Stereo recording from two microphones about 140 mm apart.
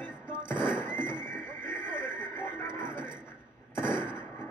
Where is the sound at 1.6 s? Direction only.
70° right (ahead or behind).